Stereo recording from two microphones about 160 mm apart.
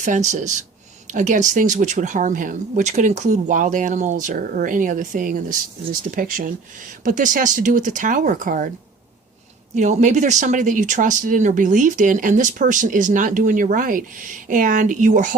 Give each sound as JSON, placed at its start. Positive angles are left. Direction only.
{"t": 0.0, "sound": "speech", "side_deg": -50}
{"t": 9.7, "sound": "speech", "side_deg": -50}